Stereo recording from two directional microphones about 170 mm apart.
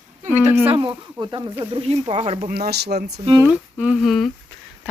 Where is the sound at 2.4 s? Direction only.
65° right (ahead or behind).